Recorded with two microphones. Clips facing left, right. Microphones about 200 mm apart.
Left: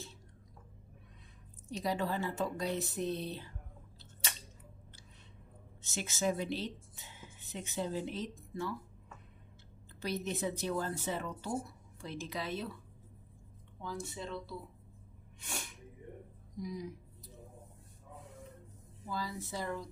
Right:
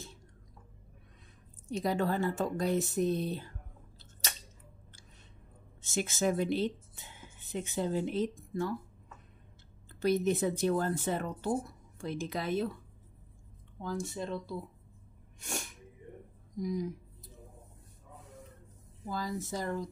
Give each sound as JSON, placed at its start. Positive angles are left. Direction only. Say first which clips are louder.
{"t": 1.7, "sound": "speech", "louder": "right 4 dB", "side_deg": -50}
{"t": 5.8, "sound": "speech", "louder": "right 5 dB", "side_deg": -50}
{"t": 10.0, "sound": "speech", "louder": "right 8 dB", "side_deg": -50}
{"t": 13.7, "sound": "speech", "louder": "right 5 dB", "side_deg": -45}
{"t": 16.5, "sound": "speech", "louder": "right 7 dB", "side_deg": -50}
{"t": 19.0, "sound": "speech", "louder": "right 4 dB", "side_deg": -45}